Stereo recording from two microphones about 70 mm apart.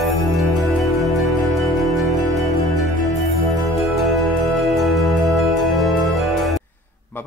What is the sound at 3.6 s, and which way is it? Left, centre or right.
Music, centre.